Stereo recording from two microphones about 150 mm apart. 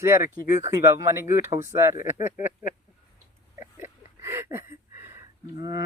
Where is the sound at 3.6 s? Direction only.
15° right (ahead or behind).